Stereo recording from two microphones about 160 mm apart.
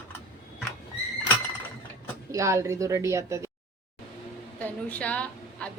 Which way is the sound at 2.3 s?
20° right (ahead or behind).